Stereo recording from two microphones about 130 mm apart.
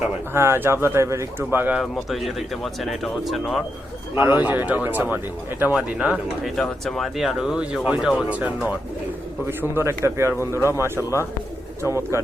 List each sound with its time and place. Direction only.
0.3 s speech: 20° right (ahead or behind)
1.8 s speech: centre (ahead or behind)
4.2 s speech: 15° right (ahead or behind)